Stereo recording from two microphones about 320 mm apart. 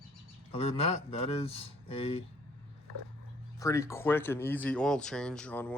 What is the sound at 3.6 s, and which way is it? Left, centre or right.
Speech, centre.